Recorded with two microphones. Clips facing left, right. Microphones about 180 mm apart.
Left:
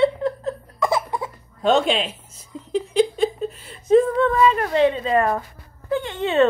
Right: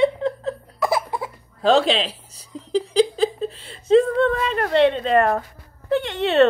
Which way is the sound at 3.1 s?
30° right (ahead or behind).